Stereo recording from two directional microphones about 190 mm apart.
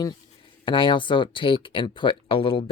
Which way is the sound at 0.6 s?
25° left (ahead or behind).